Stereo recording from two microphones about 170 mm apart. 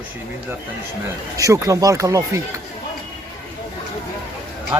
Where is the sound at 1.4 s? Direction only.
20° right (ahead or behind).